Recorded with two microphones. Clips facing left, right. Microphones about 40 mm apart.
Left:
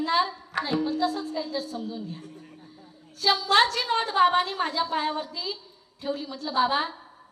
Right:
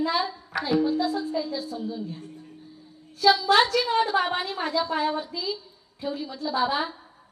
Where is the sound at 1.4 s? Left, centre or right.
Centre.